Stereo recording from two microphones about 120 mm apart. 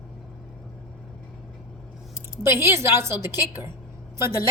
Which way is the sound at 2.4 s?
20° right (ahead or behind).